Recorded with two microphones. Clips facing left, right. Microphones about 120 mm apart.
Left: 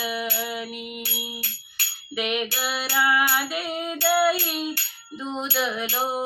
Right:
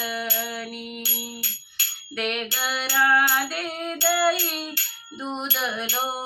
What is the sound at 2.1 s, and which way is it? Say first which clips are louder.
Music: left 2 dB; 5° left (ahead or behind).